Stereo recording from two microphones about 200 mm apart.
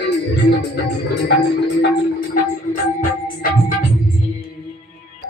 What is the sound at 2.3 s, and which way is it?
Music, 40° left (ahead or behind).